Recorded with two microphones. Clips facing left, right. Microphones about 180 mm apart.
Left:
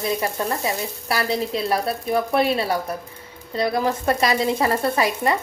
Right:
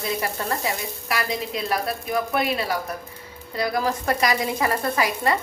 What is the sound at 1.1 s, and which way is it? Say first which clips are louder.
A woman's voice: left 4 dB; 30° left (ahead or behind).